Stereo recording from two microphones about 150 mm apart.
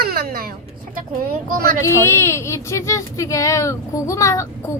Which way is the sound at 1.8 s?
15° left (ahead or behind).